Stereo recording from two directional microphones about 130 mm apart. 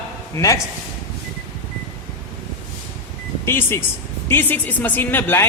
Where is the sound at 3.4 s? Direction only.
20° left (ahead or behind).